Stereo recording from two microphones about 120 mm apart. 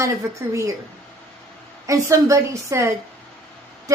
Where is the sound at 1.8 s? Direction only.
25° right (ahead or behind).